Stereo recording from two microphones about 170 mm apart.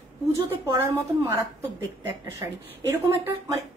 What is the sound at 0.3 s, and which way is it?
A woman's voice, 15° right (ahead or behind).